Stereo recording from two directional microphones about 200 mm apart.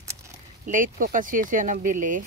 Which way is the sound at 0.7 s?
40° right (ahead or behind).